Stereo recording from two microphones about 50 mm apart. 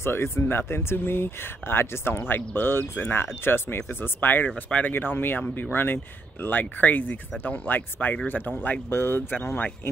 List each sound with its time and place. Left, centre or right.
0.0 s speech: left
8.5 s speech: left
8.9 s speech: left